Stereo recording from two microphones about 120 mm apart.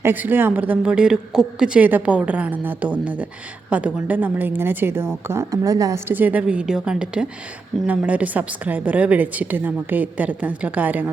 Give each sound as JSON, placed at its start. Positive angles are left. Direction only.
{"t": 0.0, "sound": "a woman's voice", "side_deg": -15}